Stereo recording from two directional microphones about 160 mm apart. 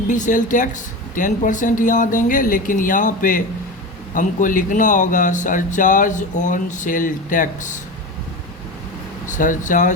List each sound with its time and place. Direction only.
0.1 s speech: 50° left (ahead or behind)
9.2 s speech: 55° left (ahead or behind)